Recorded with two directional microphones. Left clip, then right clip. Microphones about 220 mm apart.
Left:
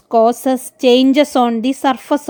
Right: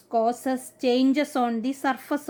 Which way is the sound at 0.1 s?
35° left (ahead or behind).